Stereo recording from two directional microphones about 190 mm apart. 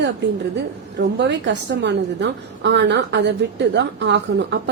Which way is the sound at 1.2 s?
65° right (ahead or behind).